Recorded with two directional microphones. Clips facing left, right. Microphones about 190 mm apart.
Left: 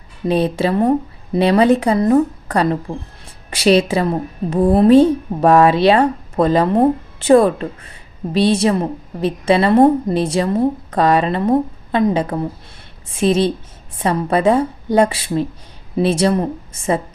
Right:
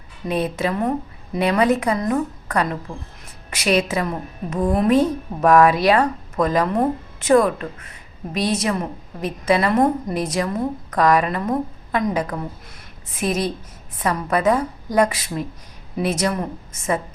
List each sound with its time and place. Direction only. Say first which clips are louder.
0.3 s a woman's voice: left 6 dB; 30° left (ahead or behind)